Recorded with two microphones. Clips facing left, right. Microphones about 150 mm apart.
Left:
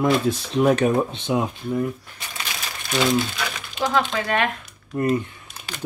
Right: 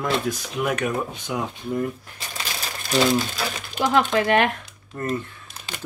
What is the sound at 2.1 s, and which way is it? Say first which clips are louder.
Crumpling: right 1 dB; 35° right (ahead or behind).